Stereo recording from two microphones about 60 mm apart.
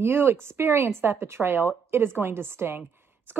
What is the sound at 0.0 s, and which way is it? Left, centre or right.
Speech, right.